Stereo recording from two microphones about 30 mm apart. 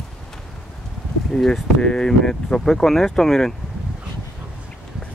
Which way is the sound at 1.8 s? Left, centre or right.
Left.